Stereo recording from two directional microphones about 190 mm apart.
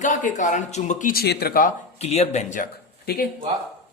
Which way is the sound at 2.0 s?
35° left (ahead or behind).